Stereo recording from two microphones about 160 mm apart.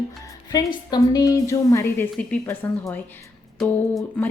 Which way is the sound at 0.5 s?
25° left (ahead or behind).